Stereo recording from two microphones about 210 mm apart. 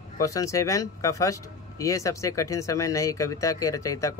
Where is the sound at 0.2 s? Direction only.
15° left (ahead or behind).